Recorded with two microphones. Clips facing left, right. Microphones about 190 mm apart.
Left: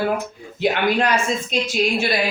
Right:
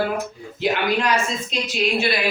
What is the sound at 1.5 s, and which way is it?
Speech, 50° left (ahead or behind).